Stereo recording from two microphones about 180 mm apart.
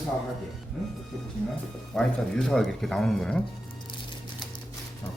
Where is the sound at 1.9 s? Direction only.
5° left (ahead or behind).